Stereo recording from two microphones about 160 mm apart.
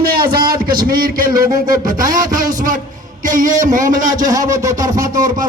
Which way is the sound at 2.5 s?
55° right (ahead or behind).